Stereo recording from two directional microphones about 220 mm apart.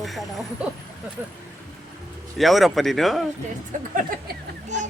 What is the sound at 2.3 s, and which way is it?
Speech, centre (ahead or behind).